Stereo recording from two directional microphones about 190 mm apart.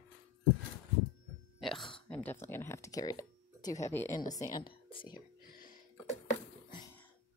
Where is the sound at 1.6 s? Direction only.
Centre (ahead or behind); by 5.2 s 25° left (ahead or behind).